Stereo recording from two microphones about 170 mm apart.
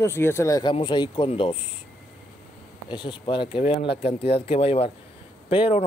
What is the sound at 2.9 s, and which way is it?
Speech, 25° left (ahead or behind).